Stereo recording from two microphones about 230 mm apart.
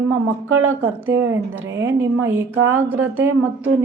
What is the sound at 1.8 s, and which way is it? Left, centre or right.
A woman's voice, centre.